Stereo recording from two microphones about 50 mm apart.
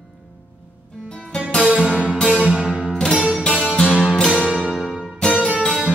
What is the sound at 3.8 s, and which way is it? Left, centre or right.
Music, right.